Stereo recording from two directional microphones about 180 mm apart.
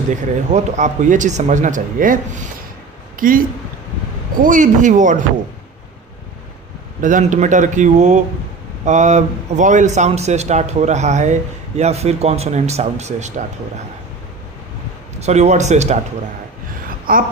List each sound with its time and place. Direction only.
0.1 s speech: 40° right (ahead or behind)
4.4 s speech: 45° right (ahead or behind)
7.0 s a man's voice: 45° right (ahead or behind)
15.2 s a man's voice: 40° right (ahead or behind)
17.1 s speech: 55° right (ahead or behind)